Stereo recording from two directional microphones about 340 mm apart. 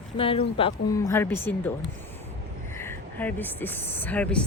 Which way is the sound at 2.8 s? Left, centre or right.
Centre.